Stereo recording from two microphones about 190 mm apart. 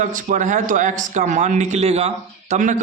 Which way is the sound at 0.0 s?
40° right (ahead or behind).